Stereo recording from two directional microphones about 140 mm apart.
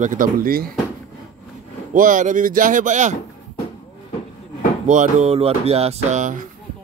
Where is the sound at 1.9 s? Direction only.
70° right (ahead or behind).